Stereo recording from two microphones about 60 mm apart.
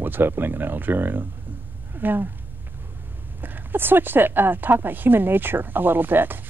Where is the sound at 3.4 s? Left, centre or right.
Right.